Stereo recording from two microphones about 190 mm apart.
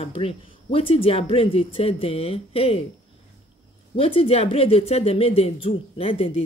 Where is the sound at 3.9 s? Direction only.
30° left (ahead or behind).